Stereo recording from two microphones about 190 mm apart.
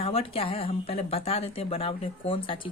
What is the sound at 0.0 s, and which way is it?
A woman's voice, 30° left (ahead or behind).